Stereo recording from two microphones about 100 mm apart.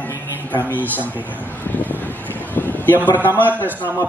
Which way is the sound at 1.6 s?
20° left (ahead or behind).